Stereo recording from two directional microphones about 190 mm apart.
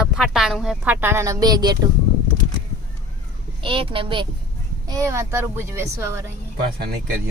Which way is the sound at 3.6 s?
30° right (ahead or behind).